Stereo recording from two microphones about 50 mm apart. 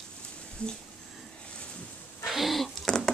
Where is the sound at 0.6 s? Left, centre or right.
Left.